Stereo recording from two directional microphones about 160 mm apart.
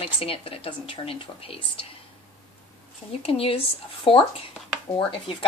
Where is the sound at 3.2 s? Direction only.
35° left (ahead or behind).